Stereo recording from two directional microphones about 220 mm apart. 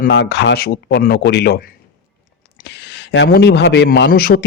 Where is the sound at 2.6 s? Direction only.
50° left (ahead or behind).